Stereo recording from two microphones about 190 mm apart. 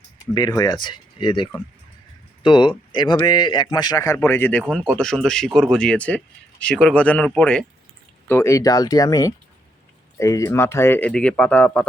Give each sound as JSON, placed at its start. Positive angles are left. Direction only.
{"t": 0.3, "sound": "speech", "side_deg": 20}